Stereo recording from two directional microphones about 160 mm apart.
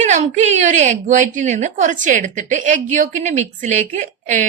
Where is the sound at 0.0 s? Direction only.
50° right (ahead or behind).